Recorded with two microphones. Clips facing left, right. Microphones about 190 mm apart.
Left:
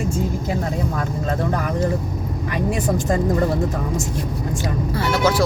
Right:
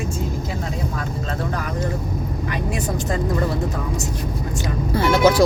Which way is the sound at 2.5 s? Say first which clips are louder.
Left 5 dB; 50° left (ahead or behind).